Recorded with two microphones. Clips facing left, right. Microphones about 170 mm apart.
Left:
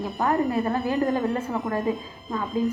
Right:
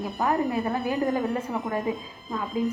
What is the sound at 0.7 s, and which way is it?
Speech, 20° right (ahead or behind).